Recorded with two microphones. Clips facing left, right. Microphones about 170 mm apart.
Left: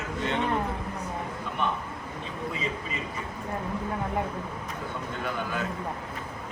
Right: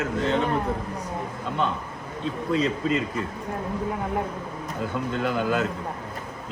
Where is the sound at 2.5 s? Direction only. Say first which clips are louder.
Right 10 dB; 90° right.